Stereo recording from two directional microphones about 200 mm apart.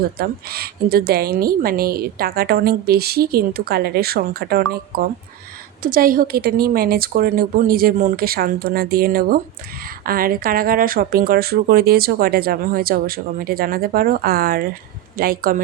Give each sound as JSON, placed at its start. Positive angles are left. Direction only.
{"t": 0.2, "sound": "a woman's voice", "side_deg": -50}